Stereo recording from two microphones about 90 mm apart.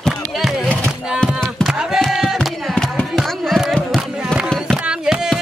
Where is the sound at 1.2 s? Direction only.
10° left (ahead or behind).